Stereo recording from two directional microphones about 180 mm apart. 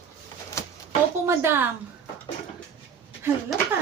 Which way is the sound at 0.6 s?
15° left (ahead or behind).